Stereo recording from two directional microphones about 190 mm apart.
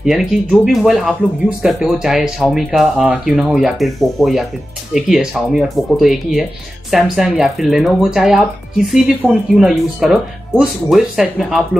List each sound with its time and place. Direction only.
0.0 s speech: centre (ahead or behind)